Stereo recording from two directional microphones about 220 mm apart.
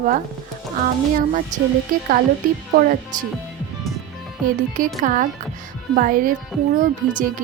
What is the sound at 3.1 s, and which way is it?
Speech, 35° right (ahead or behind).